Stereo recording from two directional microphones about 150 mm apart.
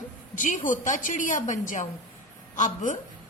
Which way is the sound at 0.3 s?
60° left (ahead or behind).